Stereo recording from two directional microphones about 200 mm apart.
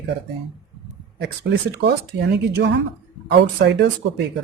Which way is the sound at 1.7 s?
55° right (ahead or behind).